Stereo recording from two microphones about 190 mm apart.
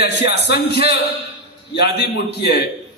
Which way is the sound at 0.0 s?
60° left (ahead or behind).